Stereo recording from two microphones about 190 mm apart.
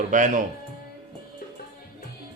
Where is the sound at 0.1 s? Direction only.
40° right (ahead or behind).